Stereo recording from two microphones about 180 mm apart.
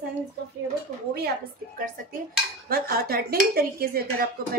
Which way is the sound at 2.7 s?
60° right (ahead or behind).